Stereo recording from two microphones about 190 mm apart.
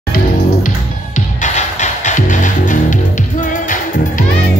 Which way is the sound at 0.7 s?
40° left (ahead or behind).